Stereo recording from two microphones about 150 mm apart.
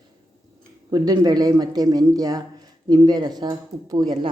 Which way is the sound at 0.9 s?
25° right (ahead or behind).